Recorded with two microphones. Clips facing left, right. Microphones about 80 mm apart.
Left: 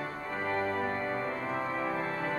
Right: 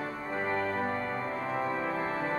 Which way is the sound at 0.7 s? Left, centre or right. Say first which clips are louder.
Even; centre.